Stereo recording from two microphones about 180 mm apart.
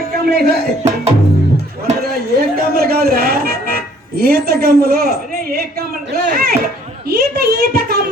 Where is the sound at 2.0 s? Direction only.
60° right (ahead or behind).